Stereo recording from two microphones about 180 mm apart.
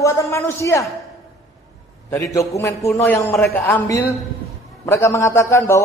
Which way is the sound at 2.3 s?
15° left (ahead or behind).